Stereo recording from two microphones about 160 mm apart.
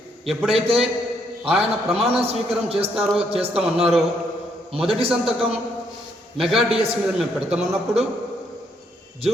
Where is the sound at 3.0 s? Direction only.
5° right (ahead or behind).